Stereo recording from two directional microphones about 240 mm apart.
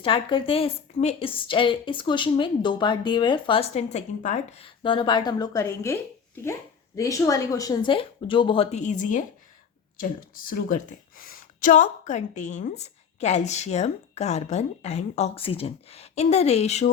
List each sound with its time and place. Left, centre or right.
0.0 s a woman's voice: left